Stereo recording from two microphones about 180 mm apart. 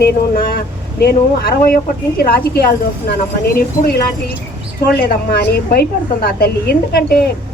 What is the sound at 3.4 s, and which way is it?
Speech, 55° left (ahead or behind).